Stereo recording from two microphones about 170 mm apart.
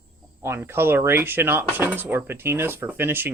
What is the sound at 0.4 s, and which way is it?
Speech, 15° right (ahead or behind).